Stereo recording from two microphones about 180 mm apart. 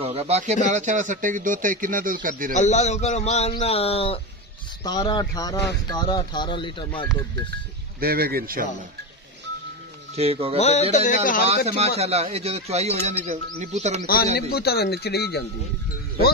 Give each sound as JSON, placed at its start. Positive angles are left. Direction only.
{"t": 0.0, "sound": "speech", "side_deg": -35}
{"t": 2.5, "sound": "a man's voice", "side_deg": 40}
{"t": 4.8, "sound": "speech", "side_deg": 20}
{"t": 8.0, "sound": "speech", "side_deg": -55}
{"t": 10.1, "sound": "speech", "side_deg": -35}
{"t": 10.6, "sound": "a man's voice", "side_deg": 35}
{"t": 11.6, "sound": "speech", "side_deg": -35}
{"t": 14.0, "sound": "speech", "side_deg": 60}